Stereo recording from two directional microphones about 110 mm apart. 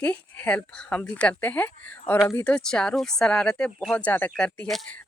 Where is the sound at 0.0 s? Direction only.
10° left (ahead or behind).